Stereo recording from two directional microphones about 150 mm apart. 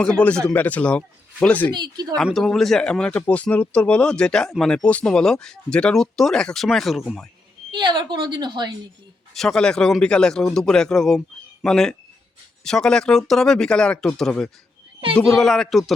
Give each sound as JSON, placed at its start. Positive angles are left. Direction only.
{"t": 0.0, "sound": "speech", "side_deg": 5}
{"t": 1.7, "sound": "a woman's voice", "side_deg": -25}
{"t": 2.1, "sound": "speech", "side_deg": 0}
{"t": 7.7, "sound": "a woman's voice", "side_deg": -30}
{"t": 9.3, "sound": "speech", "side_deg": 5}